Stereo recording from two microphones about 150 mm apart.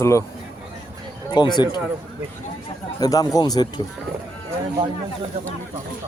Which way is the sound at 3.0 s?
25° left (ahead or behind).